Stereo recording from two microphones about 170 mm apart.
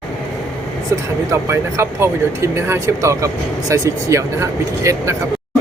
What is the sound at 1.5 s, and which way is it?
Speech, 15° right (ahead or behind).